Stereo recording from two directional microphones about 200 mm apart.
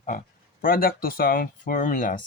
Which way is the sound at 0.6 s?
45° left (ahead or behind).